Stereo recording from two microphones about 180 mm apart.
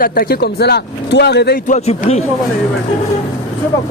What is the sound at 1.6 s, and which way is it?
Speech, 40° left (ahead or behind).